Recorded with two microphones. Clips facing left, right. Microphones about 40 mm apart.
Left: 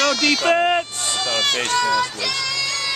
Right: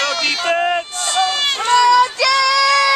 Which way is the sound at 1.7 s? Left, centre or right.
Right.